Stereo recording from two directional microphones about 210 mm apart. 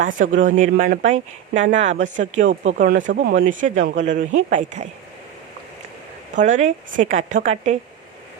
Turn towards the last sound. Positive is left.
turn(degrees=-35)  # may be behind; listen again after turning